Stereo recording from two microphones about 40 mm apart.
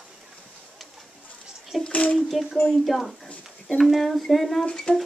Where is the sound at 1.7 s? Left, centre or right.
Centre.